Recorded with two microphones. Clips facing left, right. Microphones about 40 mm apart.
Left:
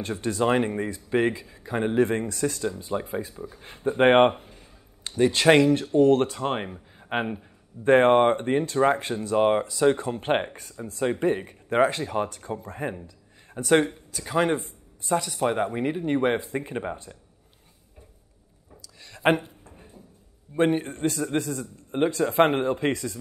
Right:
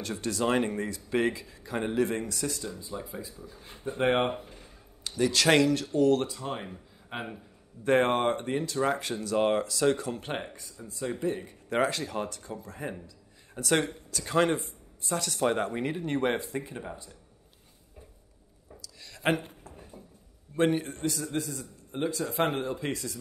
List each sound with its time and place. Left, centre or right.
0.0 s speech: left
5.0 s speech: left
6.2 s speech: left
7.2 s speech: left
10.6 s speech: left
11.7 s speech: left
14.2 s speech: centre
14.5 s speech: left
16.4 s speech: left
19.0 s a sound: left
20.5 s speech: centre
20.9 s speech: left